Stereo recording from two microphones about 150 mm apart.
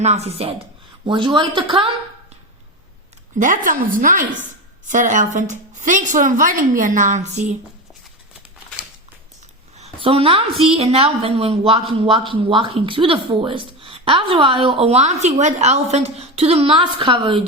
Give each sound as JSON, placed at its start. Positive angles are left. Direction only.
{"t": 0.0, "sound": "speech", "side_deg": -45}
{"t": 1.0, "sound": "a woman's voice", "side_deg": -35}
{"t": 3.3, "sound": "a woman's voice", "side_deg": -60}
{"t": 9.7, "sound": "a sound", "side_deg": -40}
{"t": 10.6, "sound": "a woman's voice", "side_deg": -40}